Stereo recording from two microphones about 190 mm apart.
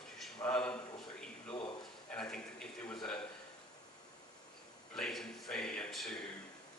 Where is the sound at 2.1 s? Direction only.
5° left (ahead or behind).